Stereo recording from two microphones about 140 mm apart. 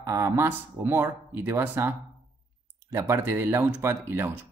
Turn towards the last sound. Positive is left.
turn(degrees=-15)  # may be behind; listen again after turning